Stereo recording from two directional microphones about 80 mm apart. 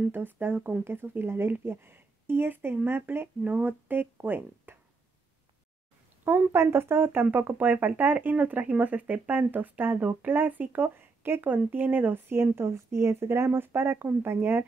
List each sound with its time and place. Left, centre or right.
0.1 s speech: right
6.2 s speech: right